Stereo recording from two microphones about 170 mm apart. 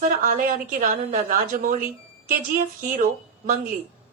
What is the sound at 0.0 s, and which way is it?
A woman's voice, 55° right (ahead or behind).